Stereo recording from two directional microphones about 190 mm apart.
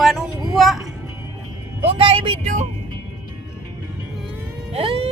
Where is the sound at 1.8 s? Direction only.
30° right (ahead or behind).